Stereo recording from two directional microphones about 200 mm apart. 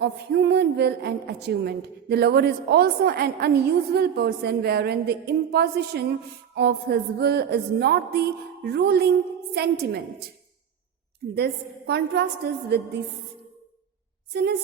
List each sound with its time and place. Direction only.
0.0 s a woman's voice: 55° right (ahead or behind)
11.3 s a woman's voice: 55° right (ahead or behind)